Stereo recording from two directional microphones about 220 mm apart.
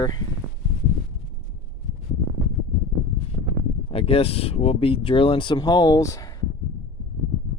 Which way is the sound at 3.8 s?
25° left (ahead or behind).